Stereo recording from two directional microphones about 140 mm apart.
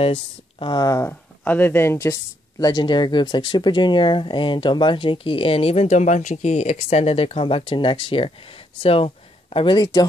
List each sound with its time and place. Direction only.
0.0 s speech: 40° left (ahead or behind)
1.0 s speech: 15° left (ahead or behind)
2.6 s speech: 30° left (ahead or behind)